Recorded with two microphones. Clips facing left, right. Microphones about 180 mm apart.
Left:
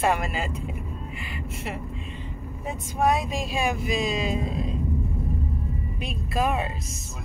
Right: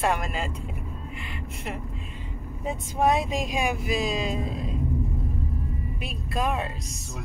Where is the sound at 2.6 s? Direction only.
25° right (ahead or behind).